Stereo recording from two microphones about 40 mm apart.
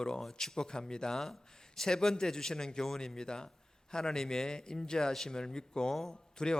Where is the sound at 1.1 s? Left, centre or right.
Centre.